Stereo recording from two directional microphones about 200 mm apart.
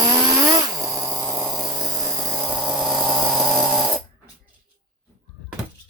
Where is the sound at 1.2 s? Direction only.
10° right (ahead or behind).